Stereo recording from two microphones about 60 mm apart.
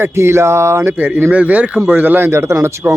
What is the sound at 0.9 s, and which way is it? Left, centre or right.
Speech, right.